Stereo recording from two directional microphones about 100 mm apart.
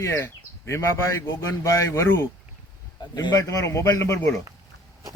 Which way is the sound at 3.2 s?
40° left (ahead or behind).